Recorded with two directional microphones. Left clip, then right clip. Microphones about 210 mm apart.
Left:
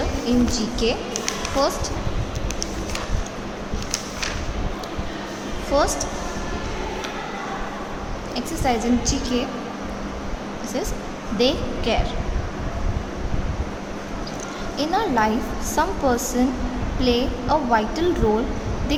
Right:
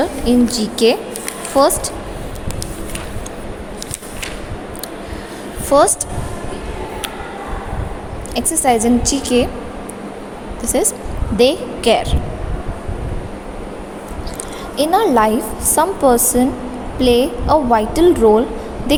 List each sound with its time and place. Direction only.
0.3 s a woman's voice: 30° right (ahead or behind)
5.7 s a woman's voice: 35° right (ahead or behind)
8.4 s a woman's voice: 35° right (ahead or behind)
10.7 s a woman's voice: 30° right (ahead or behind)
14.8 s a woman's voice: 30° right (ahead or behind)